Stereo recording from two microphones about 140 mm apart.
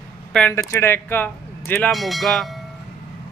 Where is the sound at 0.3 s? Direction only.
5° left (ahead or behind).